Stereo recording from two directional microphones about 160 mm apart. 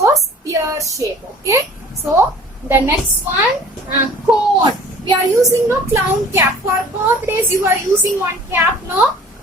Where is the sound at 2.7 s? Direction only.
15° right (ahead or behind).